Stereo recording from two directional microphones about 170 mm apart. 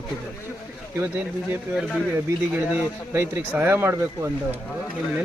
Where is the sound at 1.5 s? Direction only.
5° right (ahead or behind).